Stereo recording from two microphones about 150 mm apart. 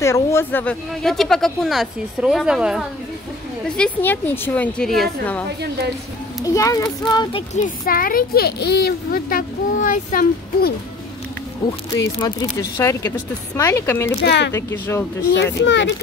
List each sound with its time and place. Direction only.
0.0 s speech: 20° left (ahead or behind)
1.0 s speech: centre (ahead or behind)
3.6 s speech: 5° left (ahead or behind)
6.4 s speech: 20° left (ahead or behind)
7.5 s speech: 65° left (ahead or behind)
11.9 s speech: 30° left (ahead or behind)